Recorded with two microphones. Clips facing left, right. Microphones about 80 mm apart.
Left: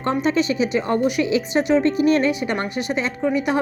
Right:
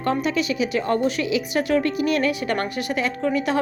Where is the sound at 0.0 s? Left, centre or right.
Left.